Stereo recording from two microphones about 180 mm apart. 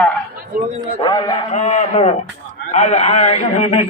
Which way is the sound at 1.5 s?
40° left (ahead or behind).